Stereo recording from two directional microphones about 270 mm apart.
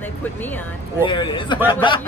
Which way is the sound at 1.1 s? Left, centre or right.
Centre.